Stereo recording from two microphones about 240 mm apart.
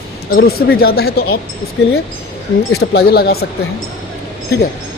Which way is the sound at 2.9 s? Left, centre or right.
Left.